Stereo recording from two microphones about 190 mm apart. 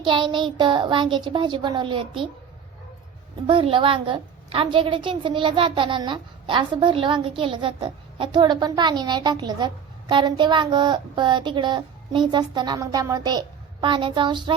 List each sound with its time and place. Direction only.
0.0 s a woman's voice: 25° right (ahead or behind)
3.4 s a woman's voice: 25° right (ahead or behind)